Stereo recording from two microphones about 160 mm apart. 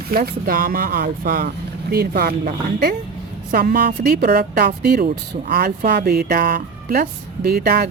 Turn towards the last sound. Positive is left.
turn(degrees=-80)